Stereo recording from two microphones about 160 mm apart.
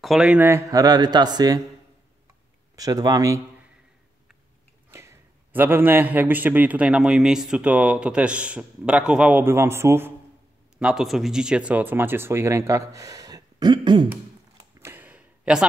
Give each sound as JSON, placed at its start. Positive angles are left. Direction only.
{"t": 0.0, "sound": "speech", "side_deg": -5}
{"t": 2.7, "sound": "speech", "side_deg": -20}
{"t": 4.9, "sound": "a man's voice", "side_deg": -15}
{"t": 10.8, "sound": "a man's voice", "side_deg": -5}
{"t": 14.8, "sound": "a sound", "side_deg": -15}